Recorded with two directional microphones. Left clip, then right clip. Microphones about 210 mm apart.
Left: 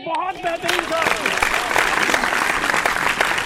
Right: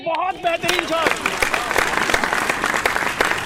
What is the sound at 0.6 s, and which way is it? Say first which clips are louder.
Applause: left 1 dB; centre (ahead or behind).